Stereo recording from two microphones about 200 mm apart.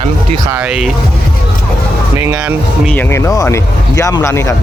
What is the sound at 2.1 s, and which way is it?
Speech, 10° right (ahead or behind).